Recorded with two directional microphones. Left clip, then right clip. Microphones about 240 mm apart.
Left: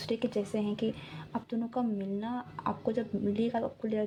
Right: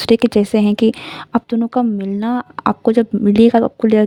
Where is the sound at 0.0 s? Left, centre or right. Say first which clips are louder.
Right 19 dB; right.